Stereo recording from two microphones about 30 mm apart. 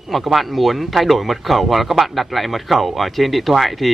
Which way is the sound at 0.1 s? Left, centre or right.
Centre.